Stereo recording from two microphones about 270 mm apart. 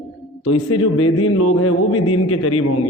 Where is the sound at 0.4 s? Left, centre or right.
Left.